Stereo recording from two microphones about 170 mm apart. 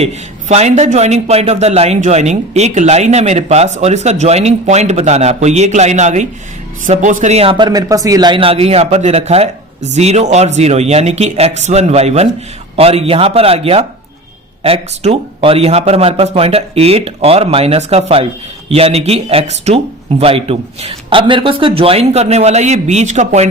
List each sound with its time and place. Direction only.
0.0 s a man's voice: 40° right (ahead or behind)
7.5 s a man's voice: 25° right (ahead or behind); by 23.5 s 40° right (ahead or behind)